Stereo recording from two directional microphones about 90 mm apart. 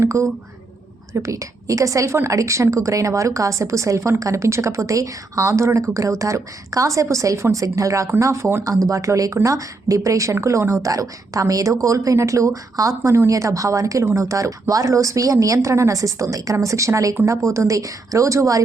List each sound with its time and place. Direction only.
0.0 s a woman's voice: 35° right (ahead or behind)